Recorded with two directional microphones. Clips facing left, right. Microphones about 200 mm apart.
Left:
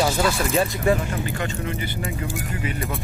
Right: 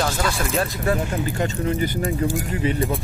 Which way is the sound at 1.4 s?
40° right (ahead or behind).